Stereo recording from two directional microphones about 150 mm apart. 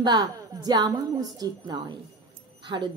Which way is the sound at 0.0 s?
25° right (ahead or behind).